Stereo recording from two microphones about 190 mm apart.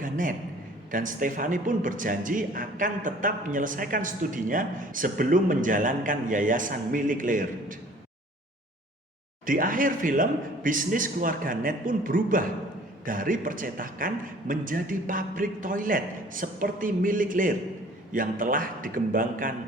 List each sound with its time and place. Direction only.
0.0 s a man's voice: 45° right (ahead or behind)
9.5 s a man's voice: 45° right (ahead or behind)